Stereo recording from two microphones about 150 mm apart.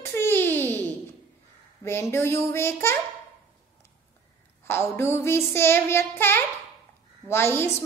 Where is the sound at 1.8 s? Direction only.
15° left (ahead or behind).